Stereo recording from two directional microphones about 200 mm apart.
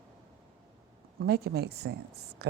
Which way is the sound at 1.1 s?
55° right (ahead or behind).